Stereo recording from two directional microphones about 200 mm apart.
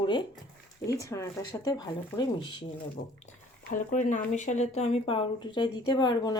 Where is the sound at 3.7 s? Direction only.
40° left (ahead or behind).